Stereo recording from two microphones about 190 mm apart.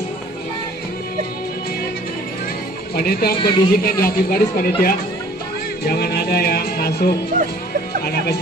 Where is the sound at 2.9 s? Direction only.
55° left (ahead or behind).